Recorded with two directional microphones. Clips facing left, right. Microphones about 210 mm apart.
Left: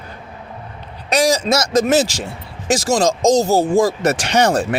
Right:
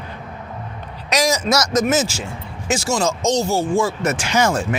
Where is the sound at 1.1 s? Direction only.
30° left (ahead or behind).